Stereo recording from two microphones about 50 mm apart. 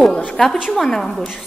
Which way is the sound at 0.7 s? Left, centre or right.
Centre.